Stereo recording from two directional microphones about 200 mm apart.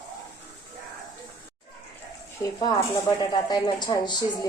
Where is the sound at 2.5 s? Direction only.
20° left (ahead or behind).